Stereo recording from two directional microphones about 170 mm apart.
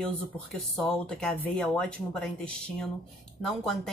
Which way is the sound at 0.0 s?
Centre (ahead or behind).